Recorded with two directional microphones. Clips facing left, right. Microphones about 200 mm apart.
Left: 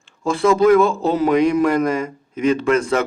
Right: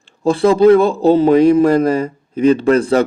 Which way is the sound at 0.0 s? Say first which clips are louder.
Right 5 dB; 35° right (ahead or behind).